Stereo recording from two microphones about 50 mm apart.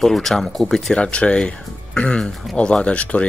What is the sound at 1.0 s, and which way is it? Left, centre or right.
Speech, left.